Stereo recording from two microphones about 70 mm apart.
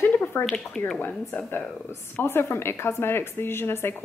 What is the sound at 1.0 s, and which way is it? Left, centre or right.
A woman's voice, left.